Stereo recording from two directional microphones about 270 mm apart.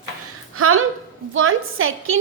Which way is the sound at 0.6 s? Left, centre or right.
Right.